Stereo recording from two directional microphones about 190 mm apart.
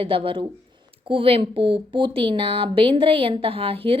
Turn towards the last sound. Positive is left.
turn(degrees=-30)  # may be behind; listen again after turning